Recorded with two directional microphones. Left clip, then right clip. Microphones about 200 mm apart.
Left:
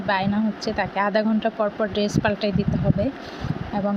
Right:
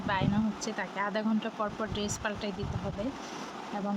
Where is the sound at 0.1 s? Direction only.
15° left (ahead or behind).